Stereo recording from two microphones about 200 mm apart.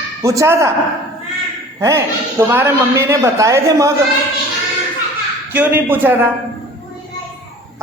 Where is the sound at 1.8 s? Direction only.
15° right (ahead or behind).